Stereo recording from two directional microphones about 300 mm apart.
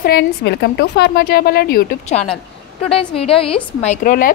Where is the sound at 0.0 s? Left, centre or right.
Left.